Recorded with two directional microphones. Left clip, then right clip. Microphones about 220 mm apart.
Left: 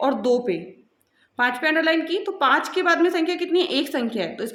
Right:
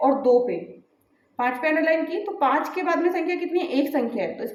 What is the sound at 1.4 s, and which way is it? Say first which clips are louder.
A woman's voice: left 2 dB; 30° left (ahead or behind).